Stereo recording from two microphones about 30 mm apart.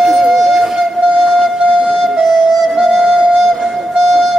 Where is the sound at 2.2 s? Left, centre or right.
Centre.